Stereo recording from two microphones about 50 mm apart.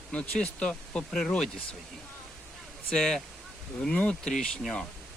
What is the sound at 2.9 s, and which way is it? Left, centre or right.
Speech, centre.